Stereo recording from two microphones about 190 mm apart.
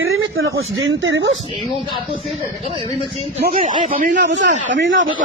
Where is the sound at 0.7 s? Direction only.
75° right (ahead or behind).